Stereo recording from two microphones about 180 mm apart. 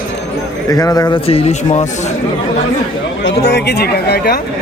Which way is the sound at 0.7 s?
20° left (ahead or behind).